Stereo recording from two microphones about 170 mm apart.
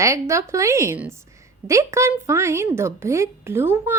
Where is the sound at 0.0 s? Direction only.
15° right (ahead or behind).